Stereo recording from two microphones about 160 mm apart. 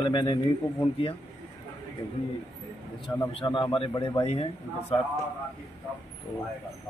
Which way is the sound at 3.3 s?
30° left (ahead or behind).